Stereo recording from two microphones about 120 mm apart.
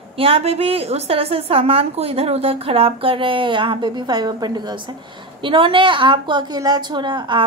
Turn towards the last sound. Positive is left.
turn(degrees=-40)  # may be behind; listen again after turning